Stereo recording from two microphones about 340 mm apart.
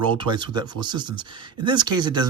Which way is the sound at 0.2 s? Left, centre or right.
Centre.